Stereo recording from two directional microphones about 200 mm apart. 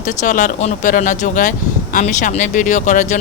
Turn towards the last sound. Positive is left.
turn(degrees=40)  # may be behind; listen again after turning